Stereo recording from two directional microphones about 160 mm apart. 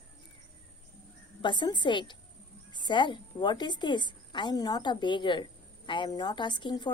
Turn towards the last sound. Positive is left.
turn(degrees=30)  # may be behind; listen again after turning